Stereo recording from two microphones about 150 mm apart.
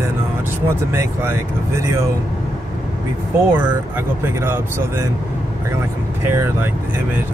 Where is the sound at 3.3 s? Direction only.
15° right (ahead or behind).